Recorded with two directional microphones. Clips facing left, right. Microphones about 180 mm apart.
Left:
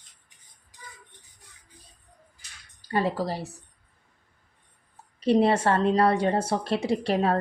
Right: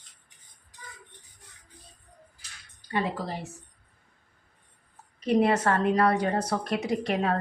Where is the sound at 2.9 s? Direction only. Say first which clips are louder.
Left 4 dB; 40° left (ahead or behind).